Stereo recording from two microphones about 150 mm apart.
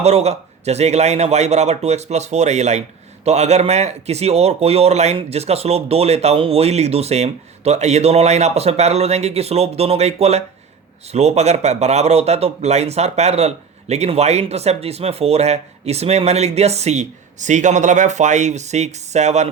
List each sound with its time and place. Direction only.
0.0 s a man's voice: 45° right (ahead or behind)